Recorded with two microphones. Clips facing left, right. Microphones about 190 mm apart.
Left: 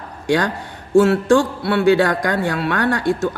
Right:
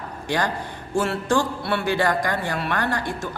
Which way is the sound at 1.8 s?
75° left (ahead or behind).